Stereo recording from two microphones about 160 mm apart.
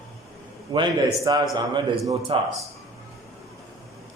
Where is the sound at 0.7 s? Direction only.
25° right (ahead or behind).